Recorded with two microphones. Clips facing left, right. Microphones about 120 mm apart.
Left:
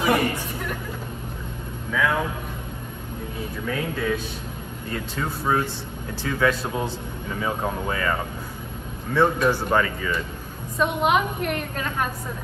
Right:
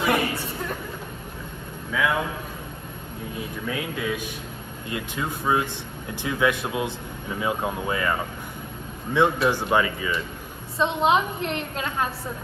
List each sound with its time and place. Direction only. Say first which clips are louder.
1.9 s a man's voice: left 1 dB; 10° right (ahead or behind)
3.6 s a man's voice: left 3 dB; 10° right (ahead or behind)
10.8 s a woman's voice: even; 25° right (ahead or behind)